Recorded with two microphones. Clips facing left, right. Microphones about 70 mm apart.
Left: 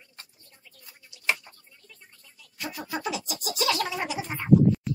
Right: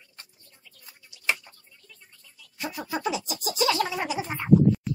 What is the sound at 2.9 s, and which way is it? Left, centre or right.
Speech, centre.